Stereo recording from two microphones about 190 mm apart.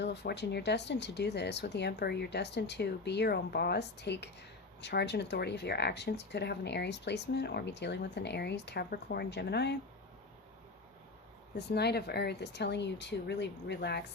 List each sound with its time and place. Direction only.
0.0 s speech: 65° left (ahead or behind)
11.5 s speech: 60° left (ahead or behind)